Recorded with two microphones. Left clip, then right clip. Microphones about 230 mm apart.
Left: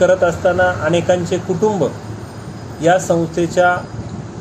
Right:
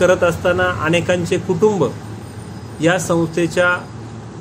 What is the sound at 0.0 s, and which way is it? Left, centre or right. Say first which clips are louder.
Speech: left 1 dB; right.